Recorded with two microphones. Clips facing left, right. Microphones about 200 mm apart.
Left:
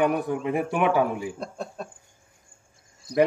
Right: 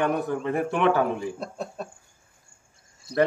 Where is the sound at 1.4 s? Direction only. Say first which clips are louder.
Right 1 dB; 5° right (ahead or behind).